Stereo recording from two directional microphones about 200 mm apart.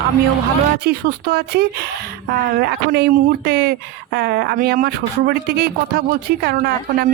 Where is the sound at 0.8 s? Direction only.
50° right (ahead or behind).